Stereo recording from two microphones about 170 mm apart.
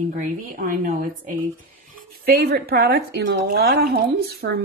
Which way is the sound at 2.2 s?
65° right (ahead or behind).